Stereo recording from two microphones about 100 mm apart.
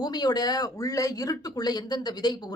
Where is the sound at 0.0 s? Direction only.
45° left (ahead or behind).